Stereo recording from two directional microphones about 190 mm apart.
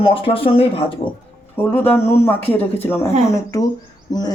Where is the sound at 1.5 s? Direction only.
10° left (ahead or behind).